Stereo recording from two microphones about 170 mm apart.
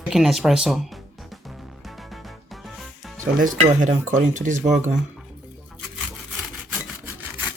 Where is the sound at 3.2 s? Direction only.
50° right (ahead or behind).